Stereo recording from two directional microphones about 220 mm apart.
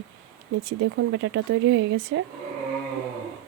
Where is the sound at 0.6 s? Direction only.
65° right (ahead or behind).